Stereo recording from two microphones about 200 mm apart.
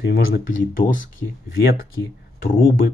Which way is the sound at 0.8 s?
40° left (ahead or behind).